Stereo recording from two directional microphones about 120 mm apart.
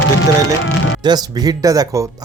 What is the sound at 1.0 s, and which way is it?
Speech, 35° right (ahead or behind).